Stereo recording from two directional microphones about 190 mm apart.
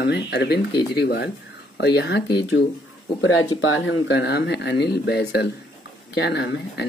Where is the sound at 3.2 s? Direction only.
90° left.